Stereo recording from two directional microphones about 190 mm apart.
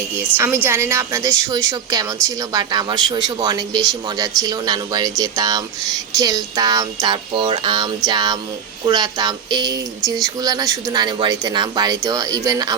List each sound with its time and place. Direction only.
0.2 s a woman's voice: 10° right (ahead or behind)